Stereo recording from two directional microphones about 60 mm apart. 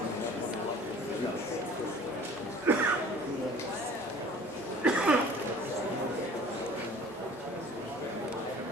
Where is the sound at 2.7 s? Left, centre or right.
Right.